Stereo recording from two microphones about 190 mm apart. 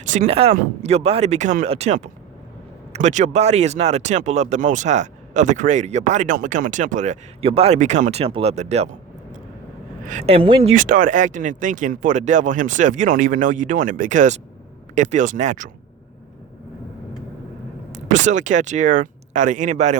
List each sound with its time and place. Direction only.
0.0 s speech: 40° right (ahead or behind)
10.1 s speech: 35° right (ahead or behind)
18.1 s speech: 40° right (ahead or behind)